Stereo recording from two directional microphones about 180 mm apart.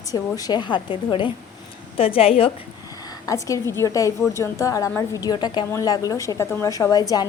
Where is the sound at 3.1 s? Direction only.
20° left (ahead or behind).